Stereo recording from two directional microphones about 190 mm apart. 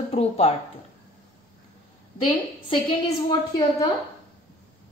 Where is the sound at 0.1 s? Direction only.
30° left (ahead or behind).